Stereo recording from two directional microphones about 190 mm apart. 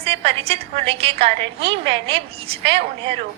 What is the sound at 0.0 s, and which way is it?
A woman's voice, 30° right (ahead or behind).